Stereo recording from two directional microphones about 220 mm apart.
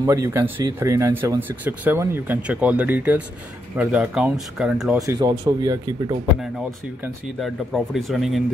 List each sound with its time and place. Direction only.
0.0 s speech: 15° right (ahead or behind)
5.0 s speech: 20° right (ahead or behind)
7.3 s speech: centre (ahead or behind)